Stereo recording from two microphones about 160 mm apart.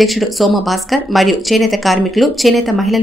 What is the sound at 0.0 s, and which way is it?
Speech, centre (ahead or behind).